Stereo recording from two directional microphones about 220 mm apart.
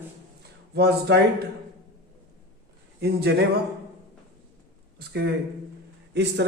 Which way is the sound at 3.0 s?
45° right (ahead or behind).